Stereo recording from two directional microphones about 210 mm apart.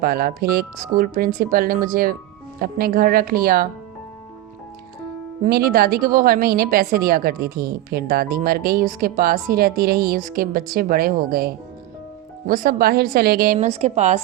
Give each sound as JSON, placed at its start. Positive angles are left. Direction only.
{"t": 0.0, "sound": "a woman's voice", "side_deg": -45}
{"t": 5.4, "sound": "a woman's voice", "side_deg": -45}